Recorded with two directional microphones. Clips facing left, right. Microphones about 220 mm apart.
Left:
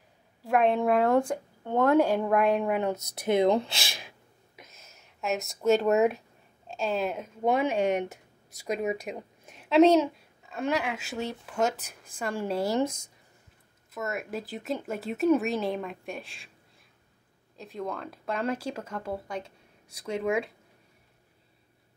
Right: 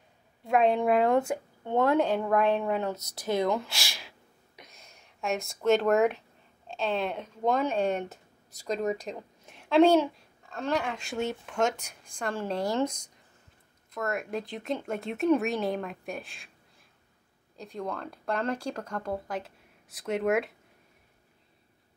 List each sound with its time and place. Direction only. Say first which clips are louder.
0.4 s a child's voice: even; centre (ahead or behind); by 4.1 s 20° left (ahead or behind)
4.6 s a sound: even; 5° left (ahead or behind)
6.7 s a woman's voice: left 1 dB; 5° left (ahead or behind)
17.6 s a child's voice: even; centre (ahead or behind)